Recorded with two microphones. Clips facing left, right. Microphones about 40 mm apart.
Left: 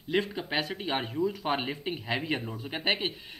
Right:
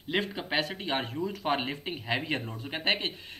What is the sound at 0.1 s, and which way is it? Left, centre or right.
Speech, centre.